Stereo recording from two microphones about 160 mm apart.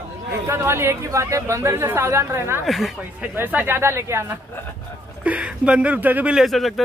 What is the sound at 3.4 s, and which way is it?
Speech, 10° right (ahead or behind).